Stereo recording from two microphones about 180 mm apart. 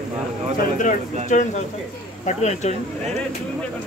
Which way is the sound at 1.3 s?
40° left (ahead or behind).